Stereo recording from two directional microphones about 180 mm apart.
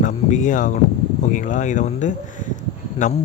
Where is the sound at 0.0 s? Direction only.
45° left (ahead or behind).